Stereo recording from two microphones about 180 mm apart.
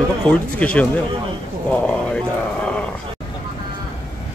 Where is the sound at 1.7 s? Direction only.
5° left (ahead or behind).